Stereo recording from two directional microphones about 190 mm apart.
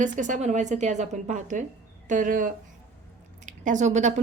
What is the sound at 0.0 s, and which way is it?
A woman's voice, 40° right (ahead or behind).